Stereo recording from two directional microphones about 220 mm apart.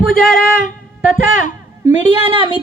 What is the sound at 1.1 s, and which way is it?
Speech, 35° left (ahead or behind).